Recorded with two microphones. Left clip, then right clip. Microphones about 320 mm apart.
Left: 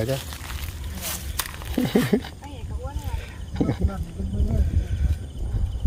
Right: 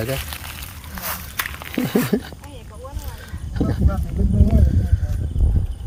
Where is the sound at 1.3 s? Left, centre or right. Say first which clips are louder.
Right 3 dB; centre.